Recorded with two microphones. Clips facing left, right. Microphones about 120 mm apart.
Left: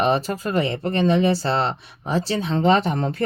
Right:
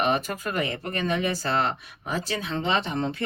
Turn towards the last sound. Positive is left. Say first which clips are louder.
# left 7 dB
turn(degrees=40)  # may be behind; listen again after turning